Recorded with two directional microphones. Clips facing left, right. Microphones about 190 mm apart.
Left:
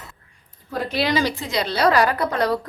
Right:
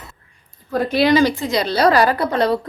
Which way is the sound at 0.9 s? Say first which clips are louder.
Right 7 dB; 50° right (ahead or behind).